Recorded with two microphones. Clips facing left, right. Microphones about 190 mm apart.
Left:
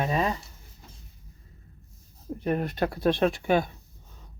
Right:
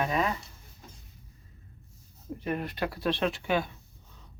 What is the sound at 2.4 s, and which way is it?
Speech, 45° left (ahead or behind).